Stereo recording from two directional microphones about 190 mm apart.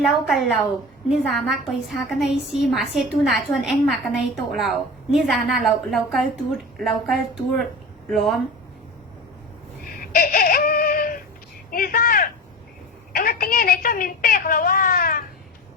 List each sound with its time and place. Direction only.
0.0 s a woman's voice: centre (ahead or behind)
10.0 s a woman's voice: 50° left (ahead or behind)